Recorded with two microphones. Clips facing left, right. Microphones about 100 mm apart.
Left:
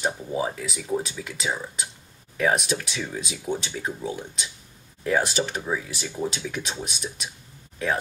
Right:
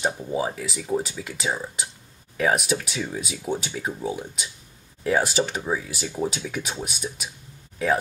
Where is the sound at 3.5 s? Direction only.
35° right (ahead or behind).